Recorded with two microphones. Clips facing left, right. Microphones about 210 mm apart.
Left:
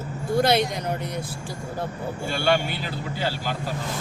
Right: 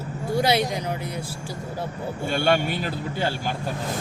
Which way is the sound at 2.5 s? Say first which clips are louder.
Left 1 dB; 50° right (ahead or behind).